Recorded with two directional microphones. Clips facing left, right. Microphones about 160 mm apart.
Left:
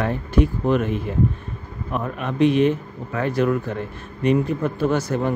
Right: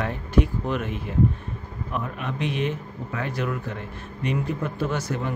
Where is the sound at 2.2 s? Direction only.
40° left (ahead or behind).